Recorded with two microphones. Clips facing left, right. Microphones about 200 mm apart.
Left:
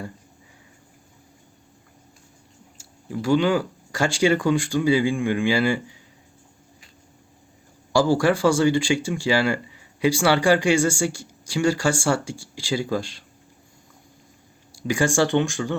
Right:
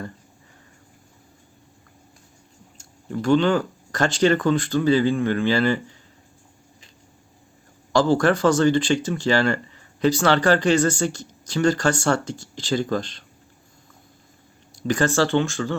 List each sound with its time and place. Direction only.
2.7 s speech: 5° left (ahead or behind)
7.9 s speech: 10° left (ahead or behind)
14.8 s speech: 10° left (ahead or behind)